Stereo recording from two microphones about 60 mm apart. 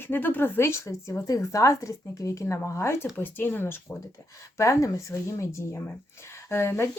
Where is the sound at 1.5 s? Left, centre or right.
Left.